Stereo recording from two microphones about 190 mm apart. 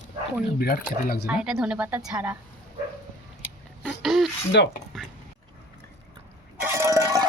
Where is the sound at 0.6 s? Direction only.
55° left (ahead or behind).